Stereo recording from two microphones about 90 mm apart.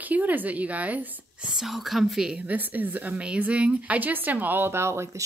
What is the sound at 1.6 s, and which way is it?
Speech, centre (ahead or behind).